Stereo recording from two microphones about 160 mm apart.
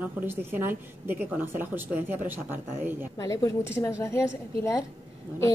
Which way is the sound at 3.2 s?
20° left (ahead or behind).